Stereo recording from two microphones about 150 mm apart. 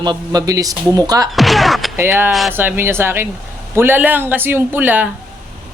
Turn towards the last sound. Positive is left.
turn(degrees=-10)  # may be behind; listen again after turning